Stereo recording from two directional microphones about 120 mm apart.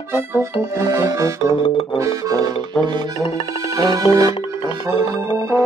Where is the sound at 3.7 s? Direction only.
30° right (ahead or behind).